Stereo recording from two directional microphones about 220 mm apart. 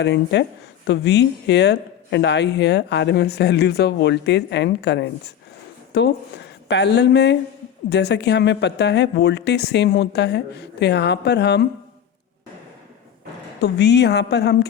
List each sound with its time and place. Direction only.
0.0 s speech: 50° left (ahead or behind)
13.6 s speech: 50° left (ahead or behind)